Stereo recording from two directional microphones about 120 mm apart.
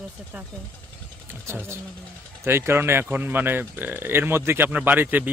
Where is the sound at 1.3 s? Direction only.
20° right (ahead or behind).